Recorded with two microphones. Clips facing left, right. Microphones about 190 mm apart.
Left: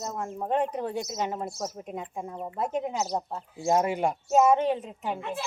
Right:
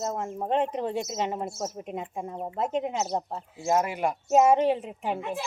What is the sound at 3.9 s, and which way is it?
Speech, 30° left (ahead or behind).